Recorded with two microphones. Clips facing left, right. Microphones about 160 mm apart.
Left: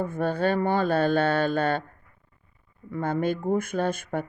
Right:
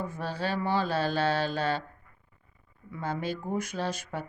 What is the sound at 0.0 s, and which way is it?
Speech, 55° left (ahead or behind).